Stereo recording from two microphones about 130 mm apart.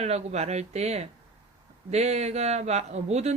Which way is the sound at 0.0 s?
55° right (ahead or behind).